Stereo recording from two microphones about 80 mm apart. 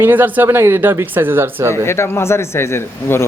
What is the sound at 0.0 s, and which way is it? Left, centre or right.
Speech, right.